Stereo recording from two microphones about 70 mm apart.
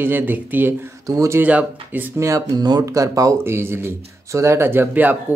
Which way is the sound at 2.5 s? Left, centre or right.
Right.